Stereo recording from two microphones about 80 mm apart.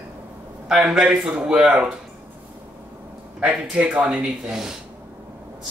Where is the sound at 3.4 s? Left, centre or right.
Centre.